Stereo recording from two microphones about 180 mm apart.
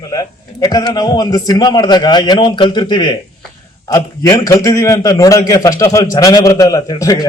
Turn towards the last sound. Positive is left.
turn(degrees=20)  # may be behind; listen again after turning